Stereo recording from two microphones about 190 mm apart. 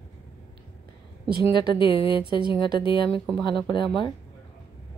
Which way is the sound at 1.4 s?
25° left (ahead or behind).